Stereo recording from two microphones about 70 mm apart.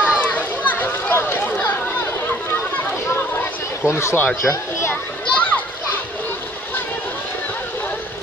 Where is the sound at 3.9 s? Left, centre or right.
Left.